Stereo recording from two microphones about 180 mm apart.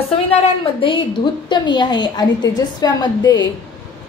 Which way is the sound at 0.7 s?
30° left (ahead or behind).